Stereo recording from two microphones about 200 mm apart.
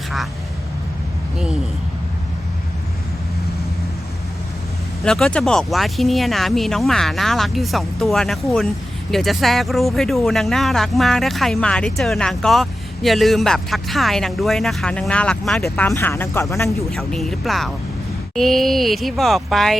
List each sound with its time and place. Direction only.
5.0 s speech: 5° left (ahead or behind)
16.9 s speech: centre (ahead or behind)